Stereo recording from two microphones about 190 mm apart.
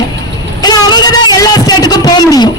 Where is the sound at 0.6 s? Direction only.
20° left (ahead or behind).